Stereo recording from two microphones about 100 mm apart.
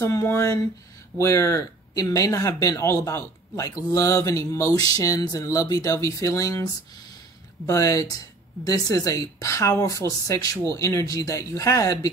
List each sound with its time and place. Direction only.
0.0 s speech: 30° left (ahead or behind)